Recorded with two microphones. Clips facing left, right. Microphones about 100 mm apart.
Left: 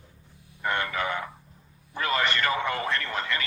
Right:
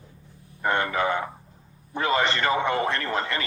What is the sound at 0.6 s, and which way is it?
Speech, 30° right (ahead or behind).